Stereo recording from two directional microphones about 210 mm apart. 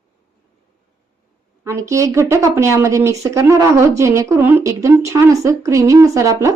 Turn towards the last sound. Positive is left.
turn(degrees=-15)  # may be behind; listen again after turning